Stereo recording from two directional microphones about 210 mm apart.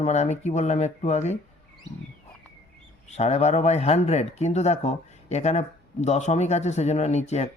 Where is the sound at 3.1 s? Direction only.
30° left (ahead or behind).